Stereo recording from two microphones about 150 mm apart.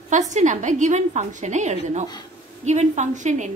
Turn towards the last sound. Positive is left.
turn(degrees=-55)  # may be behind; listen again after turning